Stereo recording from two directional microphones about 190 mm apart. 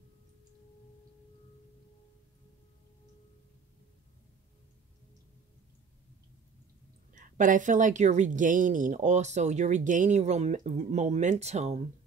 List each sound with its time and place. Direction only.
7.2 s speech: 45° right (ahead or behind)